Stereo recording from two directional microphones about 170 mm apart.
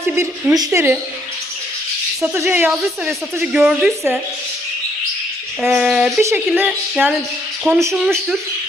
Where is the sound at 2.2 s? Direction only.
10° right (ahead or behind).